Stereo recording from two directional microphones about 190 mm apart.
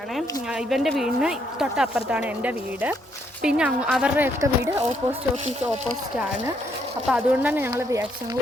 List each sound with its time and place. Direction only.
0.7 s speech: centre (ahead or behind)
7.1 s speech: 10° right (ahead or behind)